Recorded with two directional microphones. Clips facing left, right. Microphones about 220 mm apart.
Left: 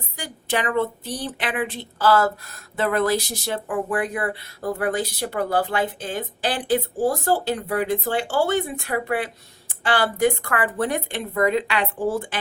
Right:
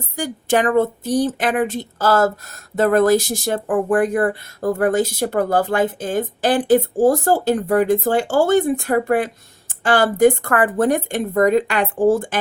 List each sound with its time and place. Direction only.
0.2 s speech: 45° right (ahead or behind)